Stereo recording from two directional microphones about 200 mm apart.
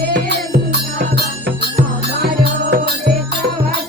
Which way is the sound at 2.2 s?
55° right (ahead or behind).